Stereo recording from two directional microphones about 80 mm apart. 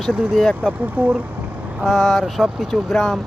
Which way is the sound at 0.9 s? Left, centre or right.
Centre.